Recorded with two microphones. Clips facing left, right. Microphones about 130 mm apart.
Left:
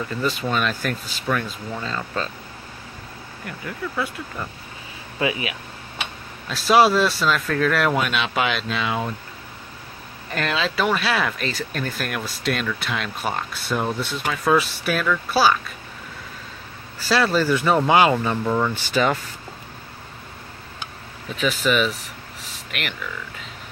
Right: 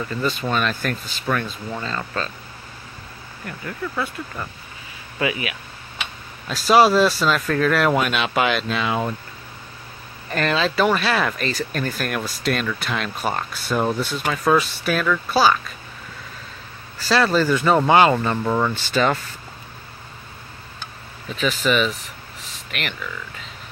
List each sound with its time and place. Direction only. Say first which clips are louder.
0.2 s speech: right 1 dB; 5° left (ahead or behind)
3.4 s speech: right 1 dB; 5° left (ahead or behind)
5.2 s speech: even; 25° left (ahead or behind)
6.5 s speech: right 1 dB; centre (ahead or behind)
10.3 s speech: right 3 dB; centre (ahead or behind)
17.1 s speech: right 1 dB; 5° left (ahead or behind)
18.4 s speech: right 1 dB; 10° right (ahead or behind)
18.7 s speech: right 1 dB; 10° left (ahead or behind)
21.4 s speech: right 1 dB; 10° left (ahead or behind)